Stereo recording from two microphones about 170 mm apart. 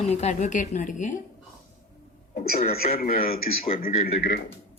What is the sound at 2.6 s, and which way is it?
Speech, 40° left (ahead or behind).